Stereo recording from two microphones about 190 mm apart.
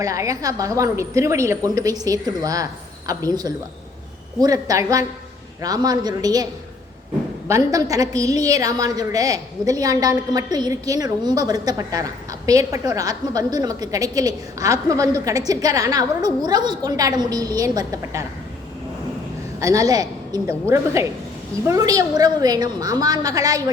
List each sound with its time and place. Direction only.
0.0 s a woman's voice: 15° right (ahead or behind)
19.5 s a woman's voice: 15° right (ahead or behind)